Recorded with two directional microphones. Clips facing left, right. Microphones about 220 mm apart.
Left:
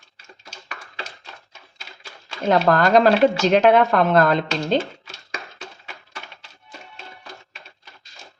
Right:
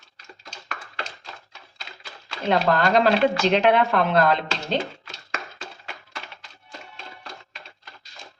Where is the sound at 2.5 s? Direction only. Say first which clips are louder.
Left 4 dB; 45° left (ahead or behind).